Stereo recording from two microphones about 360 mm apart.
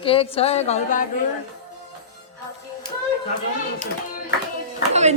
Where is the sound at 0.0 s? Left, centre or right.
Centre.